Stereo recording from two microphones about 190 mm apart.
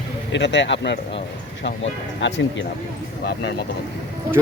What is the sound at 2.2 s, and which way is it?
Speech, 70° left (ahead or behind).